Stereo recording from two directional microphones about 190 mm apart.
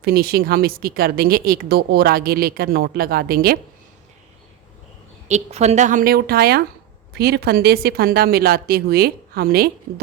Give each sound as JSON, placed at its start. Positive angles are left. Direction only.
{"t": 0.0, "sound": "a woman's voice", "side_deg": -55}
{"t": 5.3, "sound": "a woman's voice", "side_deg": -35}